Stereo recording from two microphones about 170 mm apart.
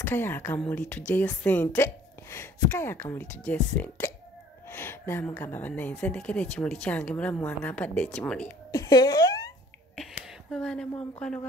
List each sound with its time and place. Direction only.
0.0 s a woman's voice: 10° left (ahead or behind)
8.7 s speech: 20° left (ahead or behind)
10.2 s a sound: 5° left (ahead or behind)
11.1 s a woman's voice: 5° left (ahead or behind)